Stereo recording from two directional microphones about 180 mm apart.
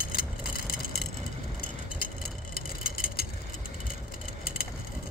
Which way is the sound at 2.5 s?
55° left (ahead or behind).